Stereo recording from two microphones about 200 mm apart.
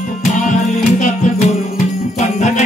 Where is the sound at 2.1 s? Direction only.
35° left (ahead or behind).